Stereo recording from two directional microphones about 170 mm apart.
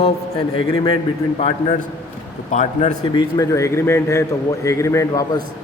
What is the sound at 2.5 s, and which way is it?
Speech, 45° left (ahead or behind).